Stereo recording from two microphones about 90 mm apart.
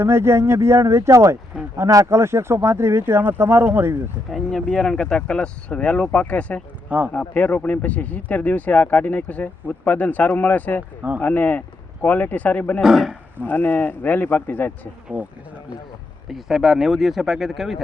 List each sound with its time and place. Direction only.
0.0 s speech: 30° right (ahead or behind)
4.3 s speech: 5° left (ahead or behind)
12.8 s speech: 5° right (ahead or behind)
13.4 s speech: 20° left (ahead or behind)
15.1 s speech: 15° right (ahead or behind)
16.3 s speech: 5° right (ahead or behind)